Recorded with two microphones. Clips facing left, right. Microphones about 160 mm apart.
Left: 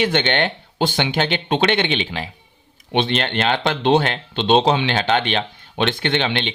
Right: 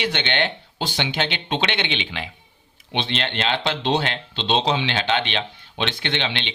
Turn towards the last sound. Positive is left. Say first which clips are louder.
# left 6 dB
turn(degrees=45)  # may be behind; listen again after turning